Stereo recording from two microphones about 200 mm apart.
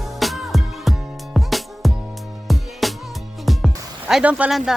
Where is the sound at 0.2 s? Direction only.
Centre (ahead or behind).